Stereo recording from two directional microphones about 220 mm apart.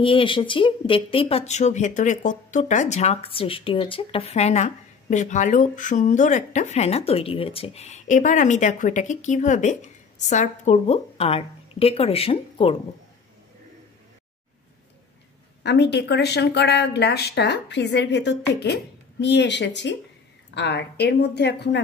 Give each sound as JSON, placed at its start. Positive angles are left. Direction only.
{"t": 0.0, "sound": "speech", "side_deg": 25}
{"t": 15.6, "sound": "speech", "side_deg": 50}